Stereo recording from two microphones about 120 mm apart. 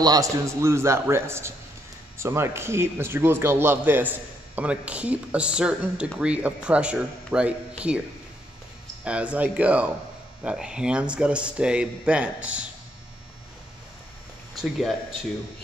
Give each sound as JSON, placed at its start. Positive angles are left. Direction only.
{"t": 0.0, "sound": "a man's voice", "side_deg": -30}
{"t": 9.0, "sound": "a man's voice", "side_deg": -10}
{"t": 14.5, "sound": "speech", "side_deg": 0}